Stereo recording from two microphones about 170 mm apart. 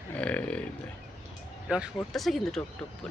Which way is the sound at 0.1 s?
5° left (ahead or behind).